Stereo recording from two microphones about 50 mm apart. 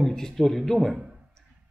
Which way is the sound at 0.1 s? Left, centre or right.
Centre.